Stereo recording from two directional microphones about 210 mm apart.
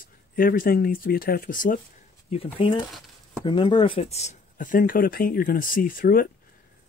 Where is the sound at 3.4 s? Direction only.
25° left (ahead or behind).